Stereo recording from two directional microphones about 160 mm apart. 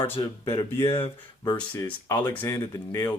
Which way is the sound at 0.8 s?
15° left (ahead or behind).